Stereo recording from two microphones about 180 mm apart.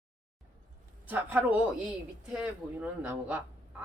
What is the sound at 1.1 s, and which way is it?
Speech, 10° right (ahead or behind).